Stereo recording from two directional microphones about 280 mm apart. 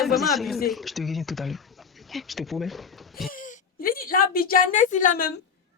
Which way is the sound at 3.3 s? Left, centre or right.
Left.